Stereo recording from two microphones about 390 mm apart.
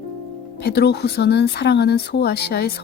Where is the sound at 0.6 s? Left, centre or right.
Left.